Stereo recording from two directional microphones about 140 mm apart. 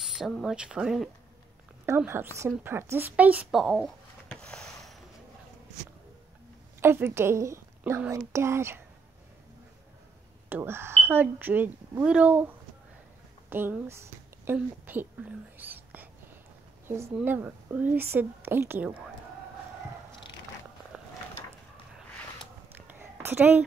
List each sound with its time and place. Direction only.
0.0 s speech: centre (ahead or behind)
1.9 s a woman's voice: 15° right (ahead or behind)
3.6 s a sound: centre (ahead or behind)
6.8 s a woman's voice: 15° right (ahead or behind)
10.5 s speech: 15° right (ahead or behind)
22.8 s a sound: 15° right (ahead or behind)